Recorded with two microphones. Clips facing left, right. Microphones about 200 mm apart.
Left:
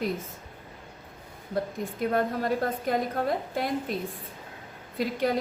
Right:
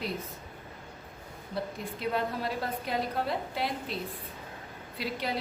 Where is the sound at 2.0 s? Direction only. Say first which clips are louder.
Left 5 dB; 45° left (ahead or behind).